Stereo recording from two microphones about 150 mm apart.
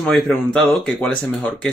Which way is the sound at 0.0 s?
5° left (ahead or behind).